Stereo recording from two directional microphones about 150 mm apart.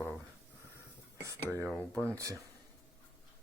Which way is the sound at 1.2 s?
20° right (ahead or behind).